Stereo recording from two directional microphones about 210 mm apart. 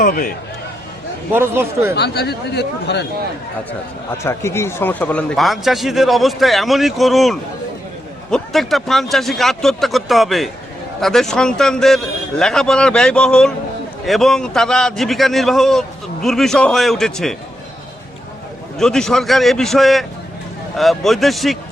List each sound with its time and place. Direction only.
0.0 s speech: 40° left (ahead or behind)
1.3 s speech: 10° right (ahead or behind)
2.0 s speech: 50° left (ahead or behind)
4.2 s a man's voice: 10° left (ahead or behind)
18.8 s a man's voice: centre (ahead or behind)